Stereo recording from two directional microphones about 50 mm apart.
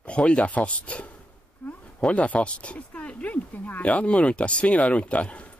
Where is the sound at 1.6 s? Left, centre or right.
Left.